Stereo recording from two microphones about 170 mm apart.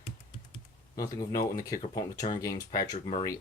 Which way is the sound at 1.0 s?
20° left (ahead or behind).